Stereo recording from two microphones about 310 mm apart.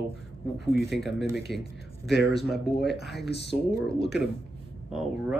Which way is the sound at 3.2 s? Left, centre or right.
Left.